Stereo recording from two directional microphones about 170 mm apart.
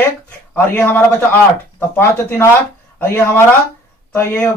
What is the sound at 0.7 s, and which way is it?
Speech, 10° left (ahead or behind).